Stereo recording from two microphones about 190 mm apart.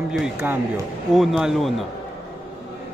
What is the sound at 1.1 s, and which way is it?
Speech, centre (ahead or behind).